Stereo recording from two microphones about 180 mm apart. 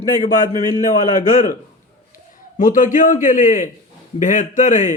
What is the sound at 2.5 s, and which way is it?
A man's voice, 45° left (ahead or behind).